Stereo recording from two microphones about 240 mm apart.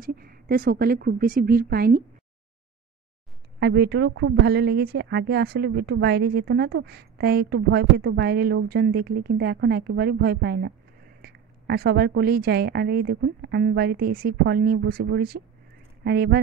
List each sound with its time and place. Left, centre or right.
0.0 s speech: right
3.5 s speech: right